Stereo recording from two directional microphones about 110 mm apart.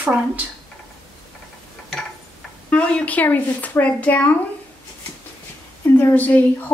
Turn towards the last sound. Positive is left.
turn(degrees=15)  # may be behind; listen again after turning